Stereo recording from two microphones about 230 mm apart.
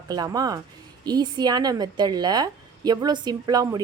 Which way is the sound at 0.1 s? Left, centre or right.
Centre.